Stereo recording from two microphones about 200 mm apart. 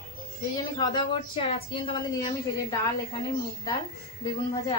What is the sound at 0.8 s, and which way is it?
Speech, 25° left (ahead or behind).